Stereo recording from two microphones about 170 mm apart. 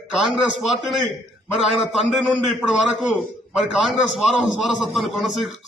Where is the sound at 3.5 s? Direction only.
5° right (ahead or behind).